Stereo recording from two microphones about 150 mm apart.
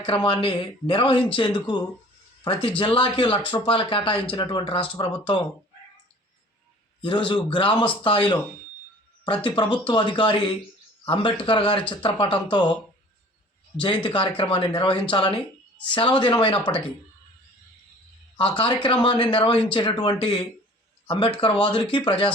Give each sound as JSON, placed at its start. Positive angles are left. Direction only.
{"t": 0.0, "sound": "speech", "side_deg": 35}
{"t": 7.3, "sound": "speech", "side_deg": 35}
{"t": 13.7, "sound": "speech", "side_deg": 35}
{"t": 18.3, "sound": "speech", "side_deg": 35}